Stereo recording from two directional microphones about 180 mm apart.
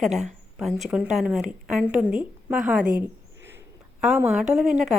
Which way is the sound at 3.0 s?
15° right (ahead or behind).